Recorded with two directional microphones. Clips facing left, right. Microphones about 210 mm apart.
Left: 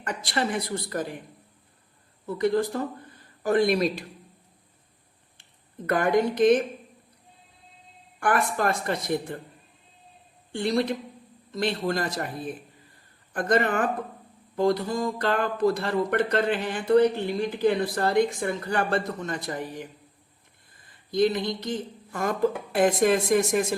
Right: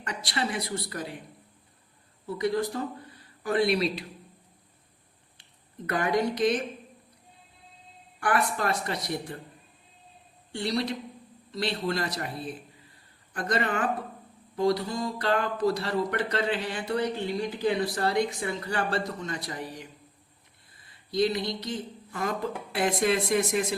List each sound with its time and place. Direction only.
0.0 s speech: 50° left (ahead or behind)
2.2 s speech: 50° left (ahead or behind)
5.8 s speech: 50° left (ahead or behind)
8.2 s speech: 50° left (ahead or behind)
10.5 s speech: 50° left (ahead or behind)